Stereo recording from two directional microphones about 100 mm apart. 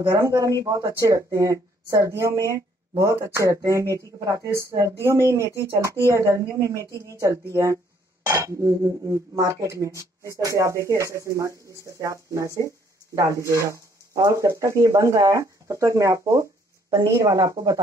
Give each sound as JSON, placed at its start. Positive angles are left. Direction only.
{"t": 0.2, "sound": "speech", "side_deg": -35}